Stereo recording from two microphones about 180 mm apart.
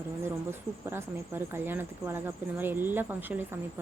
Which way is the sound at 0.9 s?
15° right (ahead or behind).